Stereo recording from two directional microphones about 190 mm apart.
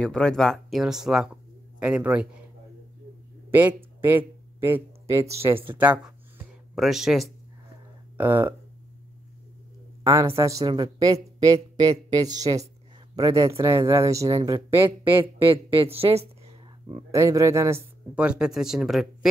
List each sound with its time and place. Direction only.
0.0 s speech: 5° left (ahead or behind)
3.4 s speech: 10° right (ahead or behind)
5.8 s a sound: 10° right (ahead or behind)
8.2 s speech: 10° right (ahead or behind)
10.0 s speech: 15° right (ahead or behind); by 17.0 s 30° right (ahead or behind)
17.1 s speech: 15° right (ahead or behind)